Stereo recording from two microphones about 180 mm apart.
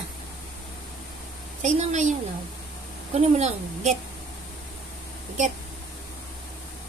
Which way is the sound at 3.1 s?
40° right (ahead or behind).